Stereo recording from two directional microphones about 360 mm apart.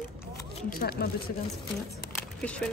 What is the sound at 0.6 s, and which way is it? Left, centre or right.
Speech, left.